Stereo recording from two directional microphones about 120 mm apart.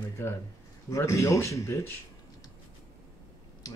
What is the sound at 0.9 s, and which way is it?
Speech, 25° left (ahead or behind).